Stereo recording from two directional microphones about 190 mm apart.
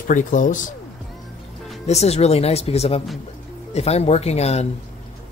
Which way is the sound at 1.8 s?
35° left (ahead or behind).